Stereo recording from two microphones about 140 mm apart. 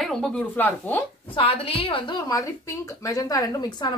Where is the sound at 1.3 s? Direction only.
40° left (ahead or behind).